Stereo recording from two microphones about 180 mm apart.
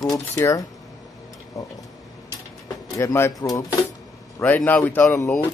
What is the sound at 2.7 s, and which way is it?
Music, 15° left (ahead or behind).